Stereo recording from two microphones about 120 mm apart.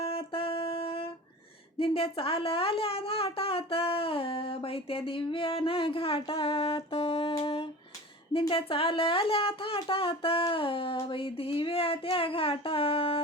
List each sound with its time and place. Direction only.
0.0 s music: 50° left (ahead or behind)
1.8 s a woman's voice: 50° left (ahead or behind)
7.4 s a sound: 50° left (ahead or behind)
8.3 s a woman's voice: 45° left (ahead or behind)